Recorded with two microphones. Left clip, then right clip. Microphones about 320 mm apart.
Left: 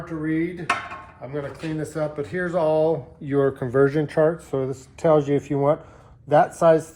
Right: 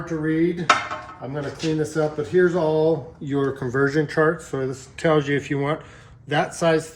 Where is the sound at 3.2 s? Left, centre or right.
Left.